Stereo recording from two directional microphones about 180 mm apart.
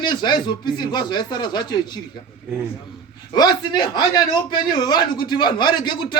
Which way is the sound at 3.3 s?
25° left (ahead or behind).